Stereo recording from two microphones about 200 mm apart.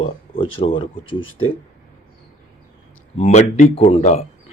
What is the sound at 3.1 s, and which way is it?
Speech, 30° left (ahead or behind).